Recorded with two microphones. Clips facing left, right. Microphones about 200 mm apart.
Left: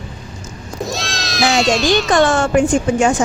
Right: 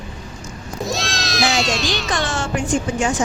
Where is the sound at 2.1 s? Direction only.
55° left (ahead or behind).